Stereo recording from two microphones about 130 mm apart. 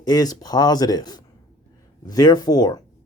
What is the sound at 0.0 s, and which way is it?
Speech, 30° left (ahead or behind).